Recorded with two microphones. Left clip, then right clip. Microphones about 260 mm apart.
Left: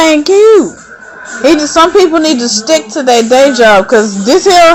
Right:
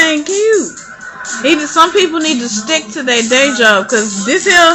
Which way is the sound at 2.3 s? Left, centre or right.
Centre.